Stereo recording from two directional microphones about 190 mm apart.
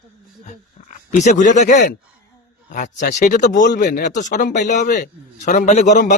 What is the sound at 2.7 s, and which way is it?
Speech, 40° left (ahead or behind).